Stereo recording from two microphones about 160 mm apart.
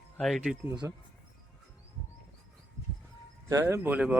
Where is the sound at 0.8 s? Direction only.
15° right (ahead or behind).